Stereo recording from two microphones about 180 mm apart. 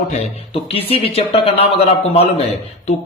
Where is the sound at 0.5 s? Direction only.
35° left (ahead or behind).